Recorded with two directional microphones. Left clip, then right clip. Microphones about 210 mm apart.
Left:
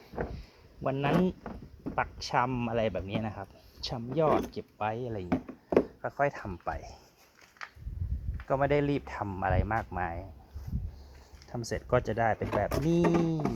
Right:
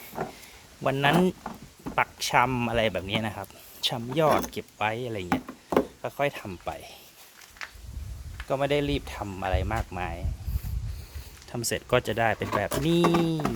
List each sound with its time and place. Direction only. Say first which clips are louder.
0.8 s speech: right 6 dB; 20° right (ahead or behind)
8.4 s speech: right 1 dB; 5° left (ahead or behind)
11.5 s speech: right 4 dB; 15° right (ahead or behind)